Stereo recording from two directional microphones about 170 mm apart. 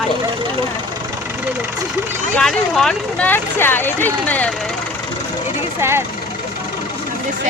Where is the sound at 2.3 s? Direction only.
5° left (ahead or behind).